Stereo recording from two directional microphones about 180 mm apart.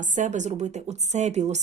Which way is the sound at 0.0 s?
45° right (ahead or behind).